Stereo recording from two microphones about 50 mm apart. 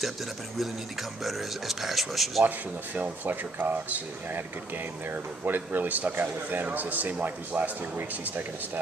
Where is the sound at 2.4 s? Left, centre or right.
Right.